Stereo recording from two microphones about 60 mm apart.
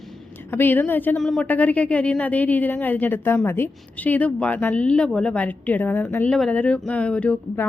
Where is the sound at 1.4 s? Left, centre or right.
Left.